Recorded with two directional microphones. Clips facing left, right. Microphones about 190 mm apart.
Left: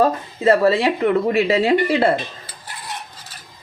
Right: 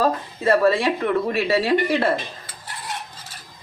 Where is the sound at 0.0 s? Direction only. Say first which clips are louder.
Left 4 dB; 25° left (ahead or behind).